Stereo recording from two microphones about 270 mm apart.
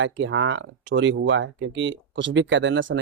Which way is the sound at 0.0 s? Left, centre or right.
Right.